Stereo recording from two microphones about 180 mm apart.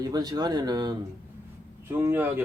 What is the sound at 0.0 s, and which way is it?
Speech, 20° right (ahead or behind).